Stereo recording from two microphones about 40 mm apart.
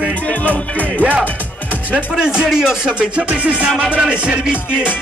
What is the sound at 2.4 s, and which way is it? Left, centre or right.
Speech, centre.